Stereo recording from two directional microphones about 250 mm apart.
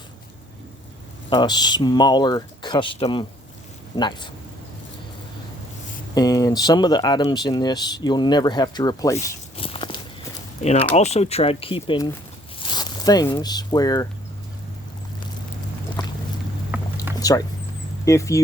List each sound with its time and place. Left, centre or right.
1.3 s speech: centre
6.1 s speech: centre
9.1 s walk: left
10.6 s speech: left
16.0 s boat: centre
16.7 s a sound: centre
17.2 s a sound: centre
18.0 s speech: centre